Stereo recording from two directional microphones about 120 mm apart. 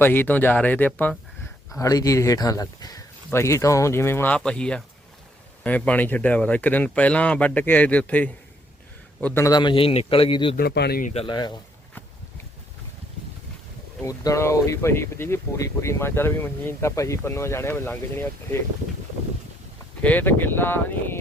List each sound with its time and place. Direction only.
0.0 s speech: 15° left (ahead or behind)
1.7 s speech: 30° left (ahead or behind)
9.5 s a man's voice: 40° left (ahead or behind)
11.0 s speech: 60° left (ahead or behind)
11.3 s speech: 35° left (ahead or behind)
14.0 s speech: 25° left (ahead or behind)
20.0 s speech: 15° left (ahead or behind)